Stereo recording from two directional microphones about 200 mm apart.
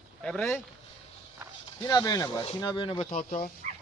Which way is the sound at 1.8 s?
20° left (ahead or behind).